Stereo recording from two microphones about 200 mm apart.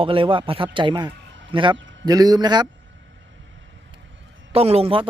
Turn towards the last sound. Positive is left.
turn(degrees=-30)  # may be behind; listen again after turning